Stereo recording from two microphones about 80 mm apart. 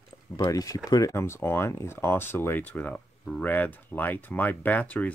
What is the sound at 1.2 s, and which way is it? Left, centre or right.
Speech, left.